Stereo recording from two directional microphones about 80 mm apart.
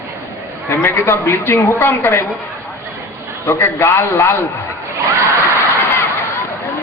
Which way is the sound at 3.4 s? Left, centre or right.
Left.